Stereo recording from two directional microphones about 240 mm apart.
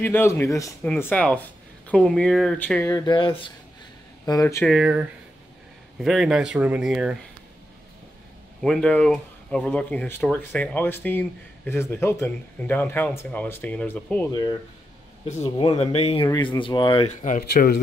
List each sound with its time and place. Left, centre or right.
0.0 s speech: centre
4.6 s speech: centre
8.6 s speech: centre
15.2 s speech: left